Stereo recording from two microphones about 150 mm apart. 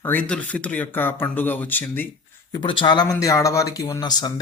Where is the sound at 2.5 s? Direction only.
35° left (ahead or behind).